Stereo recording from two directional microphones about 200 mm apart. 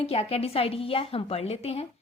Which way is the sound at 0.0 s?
30° left (ahead or behind).